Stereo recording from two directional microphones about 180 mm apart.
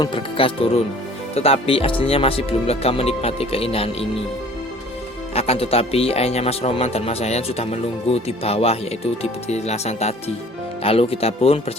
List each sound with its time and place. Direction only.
0.0 s speech: 30° left (ahead or behind)
5.3 s speech: 35° left (ahead or behind)